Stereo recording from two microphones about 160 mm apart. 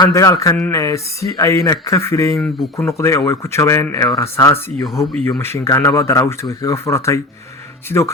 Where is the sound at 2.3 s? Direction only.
Centre (ahead or behind).